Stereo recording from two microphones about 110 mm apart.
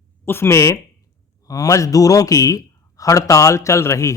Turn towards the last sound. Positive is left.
turn(degrees=25)  # may be behind; listen again after turning